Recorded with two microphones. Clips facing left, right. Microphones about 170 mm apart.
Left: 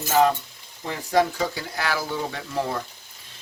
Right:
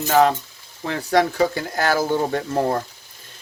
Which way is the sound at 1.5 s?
45° right (ahead or behind).